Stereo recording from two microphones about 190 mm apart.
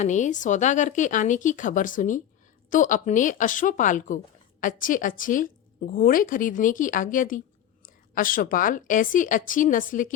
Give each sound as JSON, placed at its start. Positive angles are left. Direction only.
{"t": 0.0, "sound": "a woman's voice", "side_deg": 40}